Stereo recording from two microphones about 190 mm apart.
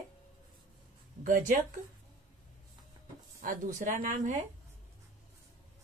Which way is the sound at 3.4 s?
45° right (ahead or behind).